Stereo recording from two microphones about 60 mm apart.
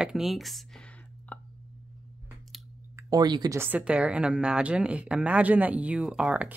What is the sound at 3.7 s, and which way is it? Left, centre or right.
A woman's voice, centre.